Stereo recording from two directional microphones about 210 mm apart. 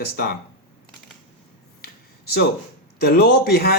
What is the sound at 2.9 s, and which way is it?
Speech, 50° left (ahead or behind).